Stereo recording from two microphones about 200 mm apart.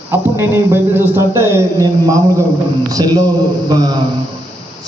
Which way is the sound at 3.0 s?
20° right (ahead or behind).